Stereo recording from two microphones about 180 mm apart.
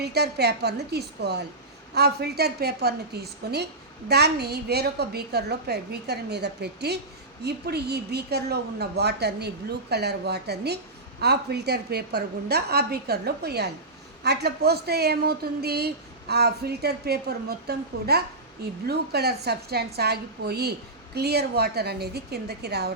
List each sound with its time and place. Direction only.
0.0 s speech: 65° right (ahead or behind)